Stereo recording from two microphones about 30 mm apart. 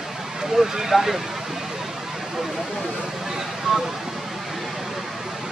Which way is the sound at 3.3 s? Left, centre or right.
Centre.